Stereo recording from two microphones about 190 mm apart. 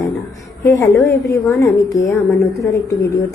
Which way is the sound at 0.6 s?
15° left (ahead or behind).